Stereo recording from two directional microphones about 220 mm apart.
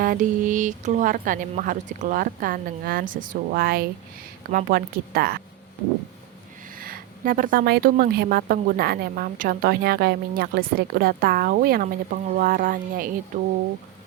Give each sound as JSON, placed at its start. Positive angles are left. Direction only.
{"t": 0.0, "sound": "a woman's voice", "side_deg": -40}
{"t": 6.7, "sound": "a woman's voice", "side_deg": -40}